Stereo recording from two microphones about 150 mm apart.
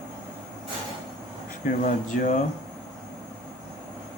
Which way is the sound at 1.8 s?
60° left (ahead or behind).